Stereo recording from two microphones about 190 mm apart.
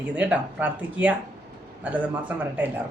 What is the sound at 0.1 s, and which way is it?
Speech, 5° right (ahead or behind).